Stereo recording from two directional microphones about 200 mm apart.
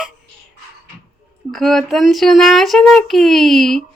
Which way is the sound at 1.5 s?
Centre (ahead or behind).